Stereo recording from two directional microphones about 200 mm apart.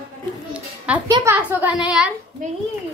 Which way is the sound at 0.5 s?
5° right (ahead or behind).